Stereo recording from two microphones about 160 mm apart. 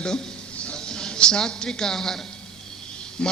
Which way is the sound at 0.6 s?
5° left (ahead or behind).